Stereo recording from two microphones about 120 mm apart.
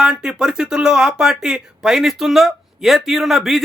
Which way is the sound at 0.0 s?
5° right (ahead or behind).